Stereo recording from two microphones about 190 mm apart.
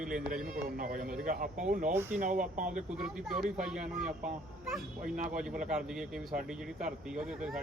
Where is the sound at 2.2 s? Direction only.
45° right (ahead or behind).